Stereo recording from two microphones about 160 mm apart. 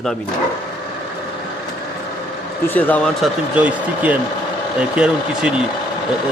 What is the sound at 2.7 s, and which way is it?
Speech, 10° left (ahead or behind).